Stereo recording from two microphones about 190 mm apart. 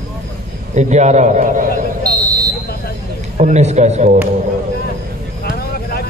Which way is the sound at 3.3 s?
35° right (ahead or behind).